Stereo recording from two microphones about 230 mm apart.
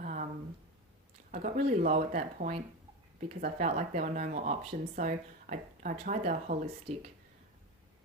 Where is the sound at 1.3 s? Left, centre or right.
Right.